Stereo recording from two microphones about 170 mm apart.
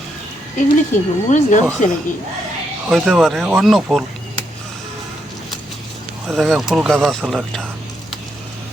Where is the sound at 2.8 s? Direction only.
Centre (ahead or behind).